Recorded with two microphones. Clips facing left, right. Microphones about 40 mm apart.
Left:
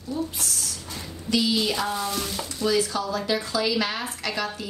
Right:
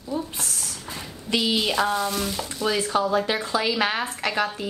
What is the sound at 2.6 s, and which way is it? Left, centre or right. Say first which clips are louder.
Speech: right 1 dB; right.